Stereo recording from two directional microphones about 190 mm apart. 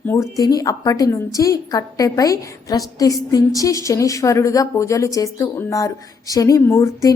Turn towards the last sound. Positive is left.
turn(degrees=15)  # may be behind; listen again after turning